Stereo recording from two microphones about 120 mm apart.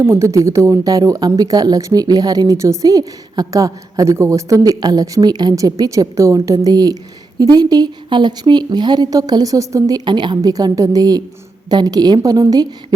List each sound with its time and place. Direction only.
0.0 s speech: 25° right (ahead or behind)